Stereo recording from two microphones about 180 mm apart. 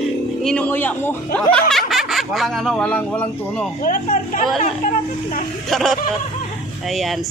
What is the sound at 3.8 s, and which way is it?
Speech, 50° left (ahead or behind).